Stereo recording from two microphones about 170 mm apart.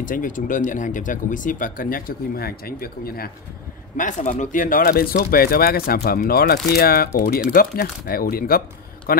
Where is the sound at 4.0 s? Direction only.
50° left (ahead or behind).